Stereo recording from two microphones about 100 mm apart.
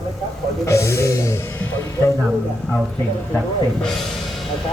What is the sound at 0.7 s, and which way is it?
Speech, 30° left (ahead or behind).